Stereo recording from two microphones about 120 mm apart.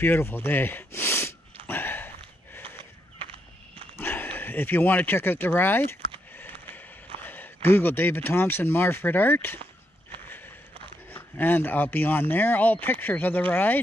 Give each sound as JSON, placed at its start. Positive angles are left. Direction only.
{"t": 0.0, "sound": "sniff", "side_deg": 15}
{"t": 3.9, "sound": "speech", "side_deg": 15}
{"t": 6.3, "sound": "a sound", "side_deg": 15}
{"t": 7.2, "sound": "speech", "side_deg": 15}
{"t": 11.3, "sound": "speech", "side_deg": 15}